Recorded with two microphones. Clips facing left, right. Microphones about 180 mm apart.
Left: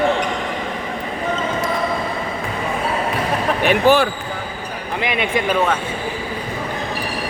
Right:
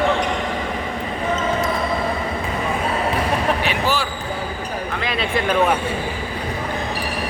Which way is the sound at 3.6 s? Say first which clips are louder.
Left 7 dB; 55° left (ahead or behind).